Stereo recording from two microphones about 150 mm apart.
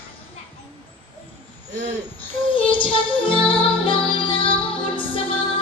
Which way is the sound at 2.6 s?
35° left (ahead or behind).